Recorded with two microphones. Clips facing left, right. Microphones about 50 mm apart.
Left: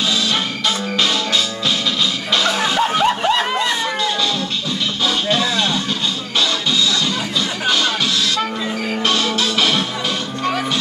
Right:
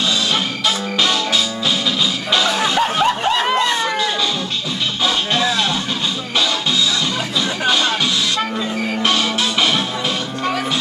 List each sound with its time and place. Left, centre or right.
0.3 s music: centre
5.0 s music: centre
7.3 s music: centre